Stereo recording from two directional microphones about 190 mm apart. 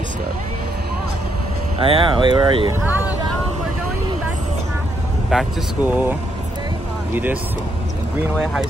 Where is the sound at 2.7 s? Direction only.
10° right (ahead or behind).